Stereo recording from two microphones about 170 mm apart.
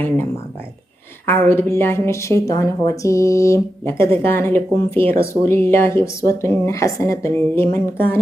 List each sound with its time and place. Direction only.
1.3 s a woman's voice: 15° left (ahead or behind)